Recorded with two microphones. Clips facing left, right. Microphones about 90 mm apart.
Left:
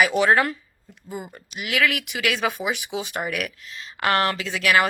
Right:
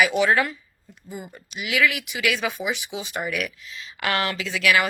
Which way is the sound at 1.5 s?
50° left (ahead or behind).